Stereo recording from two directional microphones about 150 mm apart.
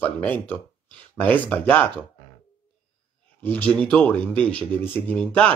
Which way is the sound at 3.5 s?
10° left (ahead or behind).